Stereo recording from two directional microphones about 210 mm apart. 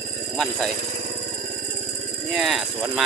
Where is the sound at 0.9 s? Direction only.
35° right (ahead or behind).